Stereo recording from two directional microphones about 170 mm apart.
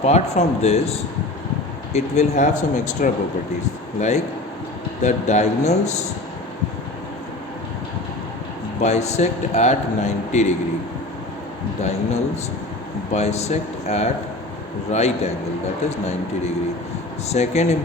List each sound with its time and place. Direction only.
0.0 s speech: 40° left (ahead or behind)
5.0 s speech: 40° left (ahead or behind)
8.8 s speech: 40° left (ahead or behind)
11.8 s speech: 40° left (ahead or behind)